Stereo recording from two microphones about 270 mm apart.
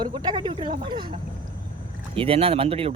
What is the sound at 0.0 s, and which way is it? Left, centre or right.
Speech, centre.